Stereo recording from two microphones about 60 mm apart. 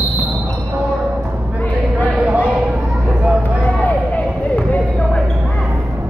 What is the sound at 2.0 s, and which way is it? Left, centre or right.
Speech, right.